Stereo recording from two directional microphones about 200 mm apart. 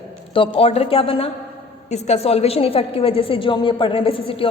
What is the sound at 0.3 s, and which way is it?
A woman's voice, 25° left (ahead or behind).